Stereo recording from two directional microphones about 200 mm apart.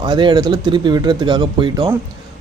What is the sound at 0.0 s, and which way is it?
Speech, 20° right (ahead or behind).